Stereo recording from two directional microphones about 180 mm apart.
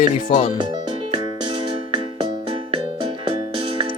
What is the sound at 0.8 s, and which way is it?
Music, 25° right (ahead or behind).